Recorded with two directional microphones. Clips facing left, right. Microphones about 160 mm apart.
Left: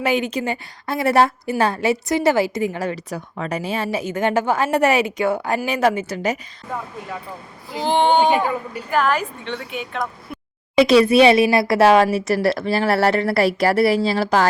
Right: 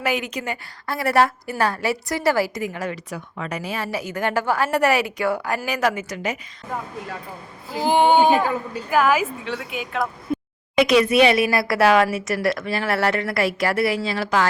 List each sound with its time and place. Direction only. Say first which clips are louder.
0.0 s a woman's voice: left 4 dB; 25° left (ahead or behind)
7.8 s speech: even; 10° right (ahead or behind)
8.3 s a woman's voice: even; 15° left (ahead or behind)
8.9 s speech: right 1 dB; 5° right (ahead or behind)
10.8 s speech: left 3 dB; 30° left (ahead or behind)